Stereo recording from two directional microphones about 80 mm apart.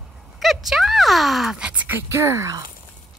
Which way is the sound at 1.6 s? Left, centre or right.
Centre.